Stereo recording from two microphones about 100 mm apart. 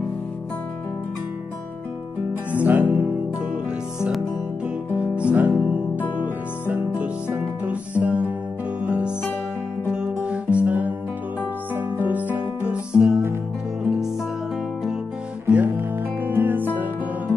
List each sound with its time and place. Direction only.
2.5 s music: 15° right (ahead or behind)
4.9 s music: 10° right (ahead or behind)
15.4 s music: 20° right (ahead or behind)